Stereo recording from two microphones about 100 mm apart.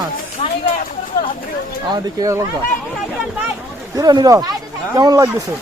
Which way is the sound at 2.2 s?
35° right (ahead or behind).